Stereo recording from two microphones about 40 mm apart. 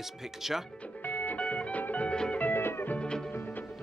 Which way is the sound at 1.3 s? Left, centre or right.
Left.